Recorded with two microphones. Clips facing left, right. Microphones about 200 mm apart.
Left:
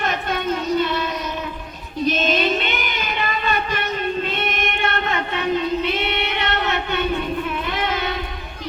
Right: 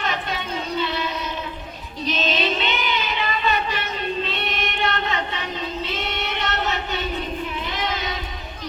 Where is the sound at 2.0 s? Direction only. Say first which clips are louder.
Left 4 dB; 50° left (ahead or behind).